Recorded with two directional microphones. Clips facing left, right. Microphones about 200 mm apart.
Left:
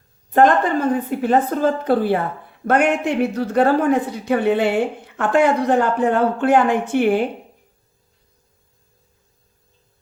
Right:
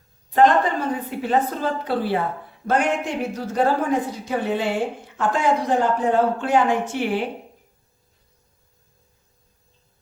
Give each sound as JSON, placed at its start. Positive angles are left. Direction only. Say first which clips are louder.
{"t": 0.3, "sound": "a woman's voice", "louder": "left 2 dB", "side_deg": 50}
{"t": 2.6, "sound": "a man's voice", "louder": "left 4 dB", "side_deg": 60}